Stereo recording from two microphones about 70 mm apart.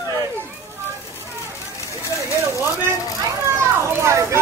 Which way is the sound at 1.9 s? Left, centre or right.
Left.